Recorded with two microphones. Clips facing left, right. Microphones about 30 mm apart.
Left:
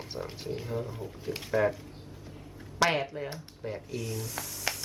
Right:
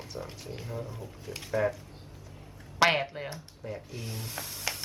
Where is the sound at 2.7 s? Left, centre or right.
Right.